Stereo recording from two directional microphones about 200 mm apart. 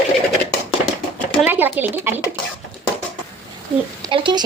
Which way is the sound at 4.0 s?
25° right (ahead or behind).